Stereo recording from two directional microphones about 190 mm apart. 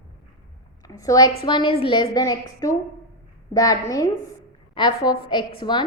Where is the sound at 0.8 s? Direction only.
20° left (ahead or behind).